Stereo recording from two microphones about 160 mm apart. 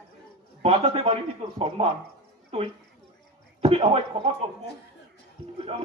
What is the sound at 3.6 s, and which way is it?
Speech, 40° right (ahead or behind).